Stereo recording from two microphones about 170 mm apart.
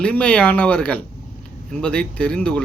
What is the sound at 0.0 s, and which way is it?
Speech, 5° left (ahead or behind).